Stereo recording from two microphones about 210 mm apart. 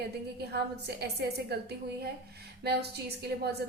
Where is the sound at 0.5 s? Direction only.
50° right (ahead or behind).